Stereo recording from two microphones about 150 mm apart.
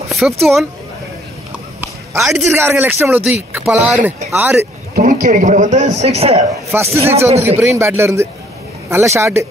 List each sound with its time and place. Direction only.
0.1 s speech: centre (ahead or behind)
2.1 s a man's voice: centre (ahead or behind)
2.7 s speech: 10° right (ahead or behind)
4.9 s a man's voice: 65° right (ahead or behind); by 6.4 s 45° right (ahead or behind)
6.7 s speech: 15° right (ahead or behind)